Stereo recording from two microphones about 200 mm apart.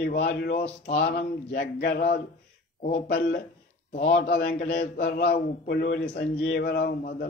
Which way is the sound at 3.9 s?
40° left (ahead or behind).